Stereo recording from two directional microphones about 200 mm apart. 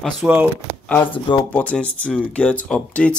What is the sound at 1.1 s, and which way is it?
Speech, 25° left (ahead or behind).